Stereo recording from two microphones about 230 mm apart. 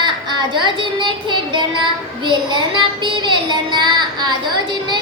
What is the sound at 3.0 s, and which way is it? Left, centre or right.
A woman's voice, centre.